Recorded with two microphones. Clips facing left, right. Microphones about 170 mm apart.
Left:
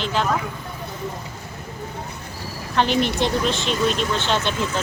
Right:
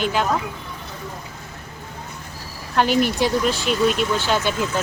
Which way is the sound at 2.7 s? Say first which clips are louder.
Right 2 dB; 5° right (ahead or behind).